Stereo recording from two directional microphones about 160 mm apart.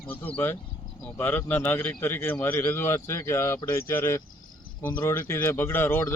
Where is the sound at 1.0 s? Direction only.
10° left (ahead or behind).